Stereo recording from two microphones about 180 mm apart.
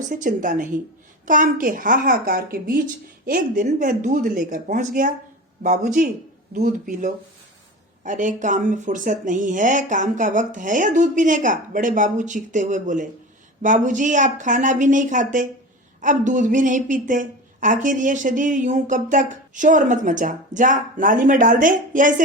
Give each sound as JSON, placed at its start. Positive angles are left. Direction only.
{"t": 0.1, "sound": "speech", "side_deg": -45}